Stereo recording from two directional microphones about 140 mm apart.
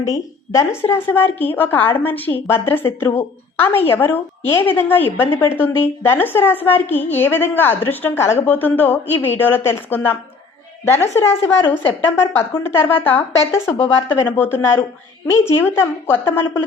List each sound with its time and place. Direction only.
0.0 s a woman's voice: 25° left (ahead or behind)